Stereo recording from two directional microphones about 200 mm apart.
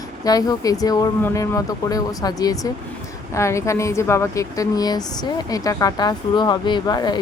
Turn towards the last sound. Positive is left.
turn(degrees=20)  # may be behind; listen again after turning